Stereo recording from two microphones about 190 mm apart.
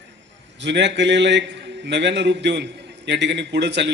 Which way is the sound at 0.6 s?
65° right (ahead or behind).